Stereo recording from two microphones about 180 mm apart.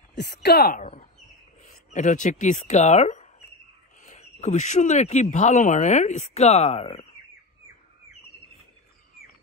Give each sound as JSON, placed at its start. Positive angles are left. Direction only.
{"t": 0.1, "sound": "speech", "side_deg": 65}
{"t": 1.7, "sound": "speech", "side_deg": 45}